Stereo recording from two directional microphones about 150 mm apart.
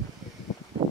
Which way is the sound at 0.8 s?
30° right (ahead or behind).